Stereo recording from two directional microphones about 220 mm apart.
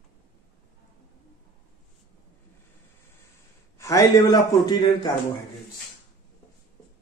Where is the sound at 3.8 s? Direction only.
15° left (ahead or behind).